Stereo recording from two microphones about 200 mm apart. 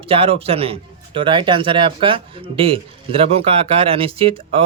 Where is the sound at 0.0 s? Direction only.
30° right (ahead or behind).